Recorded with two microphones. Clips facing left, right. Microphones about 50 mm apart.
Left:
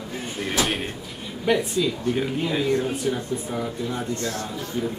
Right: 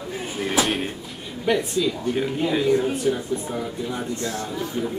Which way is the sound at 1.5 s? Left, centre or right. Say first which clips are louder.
Even; centre.